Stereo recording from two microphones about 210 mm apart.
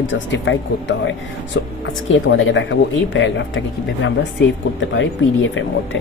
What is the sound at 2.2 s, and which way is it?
A woman's voice, 60° left (ahead or behind).